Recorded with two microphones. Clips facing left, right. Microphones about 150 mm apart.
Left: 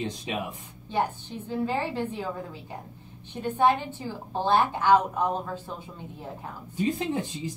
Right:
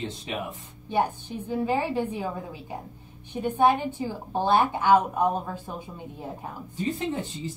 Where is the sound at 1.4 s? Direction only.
15° right (ahead or behind).